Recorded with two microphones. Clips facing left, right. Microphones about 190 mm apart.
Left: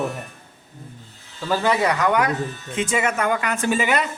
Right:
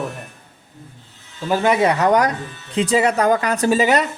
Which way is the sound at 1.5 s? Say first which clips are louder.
Right 4 dB; 20° right (ahead or behind).